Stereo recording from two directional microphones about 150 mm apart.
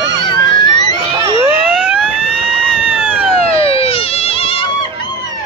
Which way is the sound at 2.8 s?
5° right (ahead or behind).